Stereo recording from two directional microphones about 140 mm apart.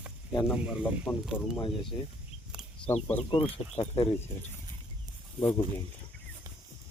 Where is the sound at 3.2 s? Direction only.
40° left (ahead or behind).